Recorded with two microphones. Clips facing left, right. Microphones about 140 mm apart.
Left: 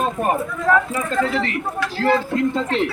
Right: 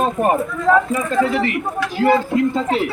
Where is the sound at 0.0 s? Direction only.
20° right (ahead or behind).